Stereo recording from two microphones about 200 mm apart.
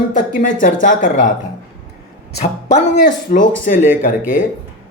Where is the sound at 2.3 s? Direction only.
35° left (ahead or behind).